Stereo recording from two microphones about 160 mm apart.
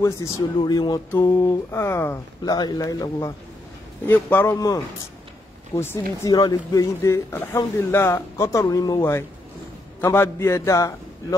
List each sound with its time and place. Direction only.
0.6 s a man's voice: 25° left (ahead or behind)